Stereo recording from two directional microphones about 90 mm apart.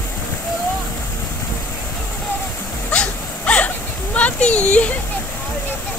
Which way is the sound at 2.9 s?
15° left (ahead or behind).